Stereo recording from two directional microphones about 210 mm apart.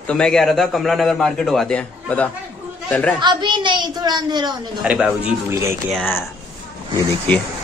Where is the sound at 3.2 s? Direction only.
20° right (ahead or behind).